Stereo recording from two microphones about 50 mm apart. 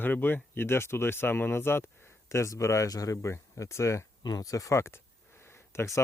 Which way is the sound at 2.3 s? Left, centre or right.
Left.